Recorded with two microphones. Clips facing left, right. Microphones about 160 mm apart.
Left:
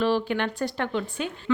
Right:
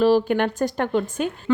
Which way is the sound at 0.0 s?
45° right (ahead or behind).